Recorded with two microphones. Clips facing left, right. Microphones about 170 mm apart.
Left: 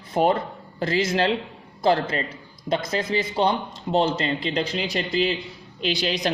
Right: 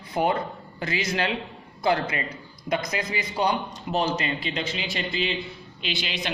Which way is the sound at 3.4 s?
25° left (ahead or behind).